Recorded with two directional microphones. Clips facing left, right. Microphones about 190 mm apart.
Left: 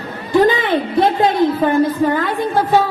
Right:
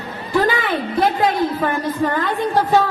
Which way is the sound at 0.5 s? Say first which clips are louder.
Left 4 dB; 25° left (ahead or behind).